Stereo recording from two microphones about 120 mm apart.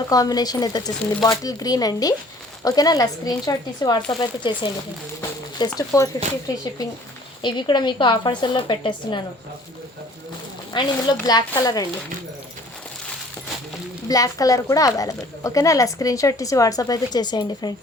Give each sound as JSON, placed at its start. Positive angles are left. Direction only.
{"t": 0.1, "sound": "speech", "side_deg": 30}
{"t": 7.4, "sound": "speech", "side_deg": 40}
{"t": 10.7, "sound": "speech", "side_deg": 35}
{"t": 14.1, "sound": "speech", "side_deg": 30}